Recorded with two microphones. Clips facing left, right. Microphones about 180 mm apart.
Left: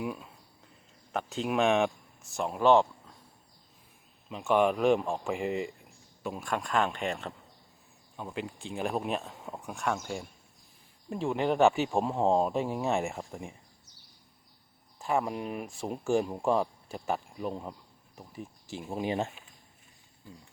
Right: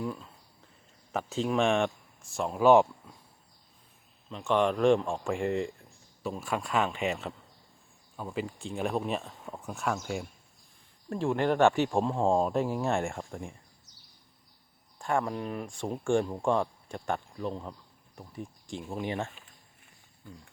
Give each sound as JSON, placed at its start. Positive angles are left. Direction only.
{"t": 0.0, "sound": "speech", "side_deg": 10}
{"t": 1.1, "sound": "speech", "side_deg": 0}
{"t": 4.3, "sound": "speech", "side_deg": 5}
{"t": 14.9, "sound": "speech", "side_deg": 5}
{"t": 18.9, "sound": "speech", "side_deg": 20}